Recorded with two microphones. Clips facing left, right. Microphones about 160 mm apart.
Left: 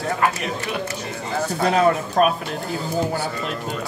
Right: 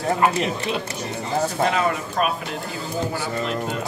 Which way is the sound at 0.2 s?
25° right (ahead or behind).